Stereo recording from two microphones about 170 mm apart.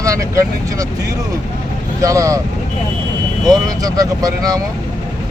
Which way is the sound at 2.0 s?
20° right (ahead or behind).